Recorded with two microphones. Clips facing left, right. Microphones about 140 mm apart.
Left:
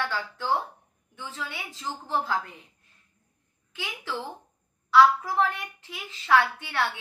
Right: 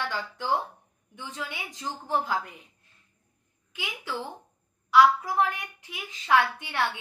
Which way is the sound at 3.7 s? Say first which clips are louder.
Even; 15° right (ahead or behind).